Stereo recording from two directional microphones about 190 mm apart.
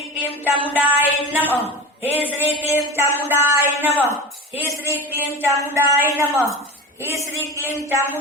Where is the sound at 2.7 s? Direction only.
15° right (ahead or behind).